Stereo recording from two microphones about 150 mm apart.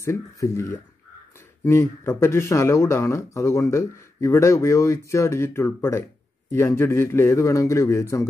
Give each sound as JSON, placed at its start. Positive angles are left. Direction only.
{"t": 0.0, "sound": "speech", "side_deg": 20}